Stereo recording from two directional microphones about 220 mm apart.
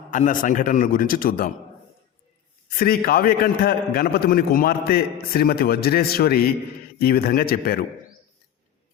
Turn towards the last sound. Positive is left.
turn(degrees=45)  # may be behind; listen again after turning